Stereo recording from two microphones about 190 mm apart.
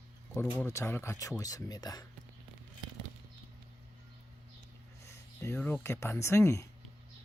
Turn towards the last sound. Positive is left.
turn(degrees=15)  # may be behind; listen again after turning